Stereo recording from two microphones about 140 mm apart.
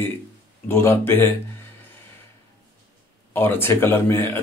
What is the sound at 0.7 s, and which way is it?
Speech, 20° left (ahead or behind).